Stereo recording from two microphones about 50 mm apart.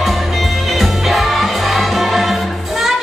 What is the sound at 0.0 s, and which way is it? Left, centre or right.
Music, centre.